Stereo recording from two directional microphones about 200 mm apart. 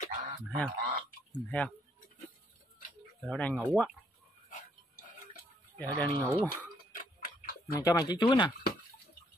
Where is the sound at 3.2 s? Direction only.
5° left (ahead or behind).